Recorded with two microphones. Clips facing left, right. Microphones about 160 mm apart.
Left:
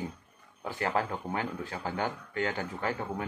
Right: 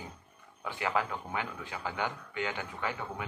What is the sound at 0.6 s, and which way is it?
A man's voice, 40° left (ahead or behind).